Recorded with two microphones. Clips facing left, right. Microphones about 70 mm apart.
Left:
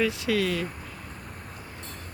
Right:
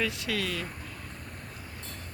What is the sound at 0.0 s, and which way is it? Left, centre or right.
Vehicle, centre.